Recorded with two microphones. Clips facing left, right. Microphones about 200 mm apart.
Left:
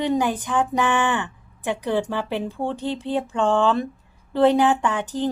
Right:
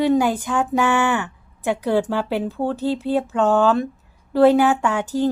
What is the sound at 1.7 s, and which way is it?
A woman's voice, 10° right (ahead or behind).